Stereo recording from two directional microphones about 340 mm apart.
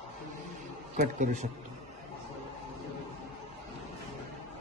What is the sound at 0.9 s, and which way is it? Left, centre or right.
Speech, right.